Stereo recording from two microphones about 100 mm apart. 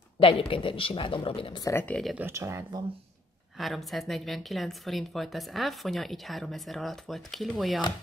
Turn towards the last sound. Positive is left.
turn(degrees=0)  # may be behind; listen again after turning